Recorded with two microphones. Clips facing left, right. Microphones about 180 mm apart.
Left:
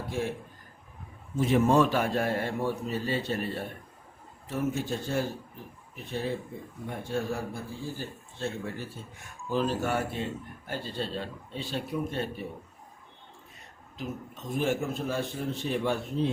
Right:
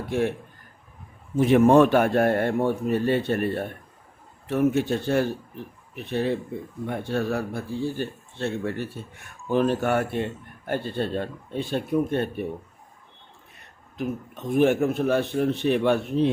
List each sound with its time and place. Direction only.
0.1 s speech: 65° right (ahead or behind)
1.4 s a man's voice: 65° right (ahead or behind)
13.9 s a man's voice: 60° right (ahead or behind)